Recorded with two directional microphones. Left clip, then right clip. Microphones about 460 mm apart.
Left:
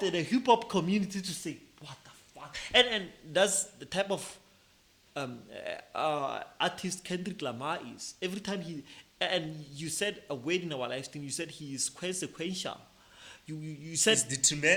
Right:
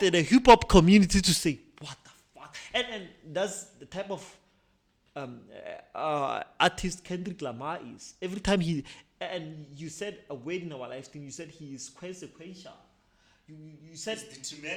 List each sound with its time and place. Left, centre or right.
0.0 s speech: right
2.5 s speech: centre
3.3 s a man's voice: right
8.4 s speech: right
9.0 s a man's voice: right
14.1 s speech: centre